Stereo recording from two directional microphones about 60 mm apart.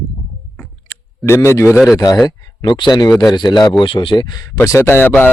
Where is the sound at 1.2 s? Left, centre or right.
Left.